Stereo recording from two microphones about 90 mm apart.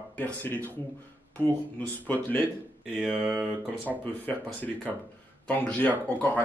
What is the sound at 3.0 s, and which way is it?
Mantra, 10° right (ahead or behind).